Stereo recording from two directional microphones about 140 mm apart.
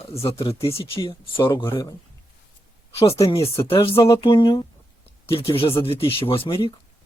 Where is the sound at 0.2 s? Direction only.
40° left (ahead or behind).